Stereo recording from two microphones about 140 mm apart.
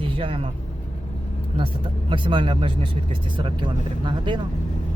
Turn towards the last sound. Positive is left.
turn(degrees=-35)  # may be behind; listen again after turning